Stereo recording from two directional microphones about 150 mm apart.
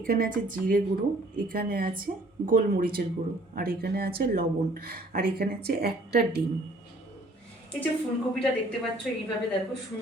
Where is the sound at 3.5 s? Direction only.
85° right.